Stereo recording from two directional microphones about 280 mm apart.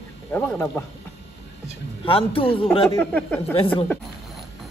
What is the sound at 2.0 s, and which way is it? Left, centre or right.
Speech, centre.